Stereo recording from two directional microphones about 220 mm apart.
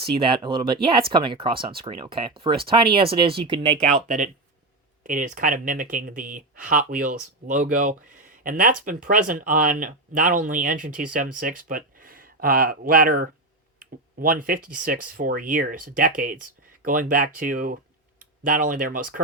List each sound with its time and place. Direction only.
0.0 s speech: 20° right (ahead or behind)
5.0 s speech: 35° right (ahead or behind)